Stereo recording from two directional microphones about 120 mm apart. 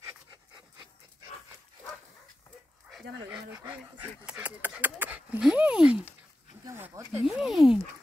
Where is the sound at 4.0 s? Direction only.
10° right (ahead or behind).